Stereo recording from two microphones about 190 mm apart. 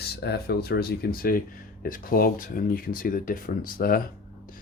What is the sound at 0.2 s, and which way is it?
Speech, 55° left (ahead or behind).